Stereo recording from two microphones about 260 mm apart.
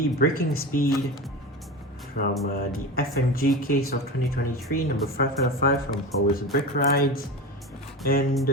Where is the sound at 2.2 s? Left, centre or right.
Left.